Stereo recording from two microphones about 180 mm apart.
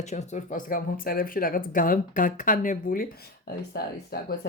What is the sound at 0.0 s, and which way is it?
Speech, 40° left (ahead or behind).